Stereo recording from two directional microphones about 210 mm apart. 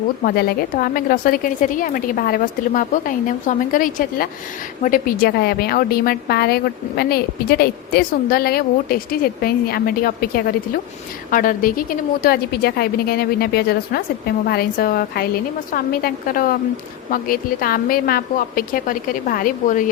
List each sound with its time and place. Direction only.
0.3 s a woman's voice: 45° left (ahead or behind)